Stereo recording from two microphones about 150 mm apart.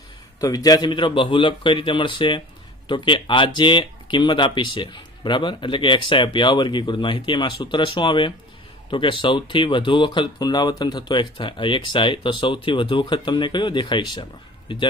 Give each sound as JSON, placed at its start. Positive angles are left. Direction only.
{"t": 0.3, "sound": "speech", "side_deg": 25}